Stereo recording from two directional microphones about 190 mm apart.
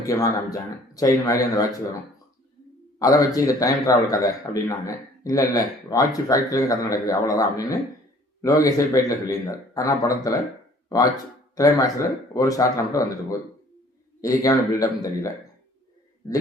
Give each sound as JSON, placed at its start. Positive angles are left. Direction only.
{"t": 0.0, "sound": "speech", "side_deg": 20}
{"t": 3.0, "sound": "speech", "side_deg": 20}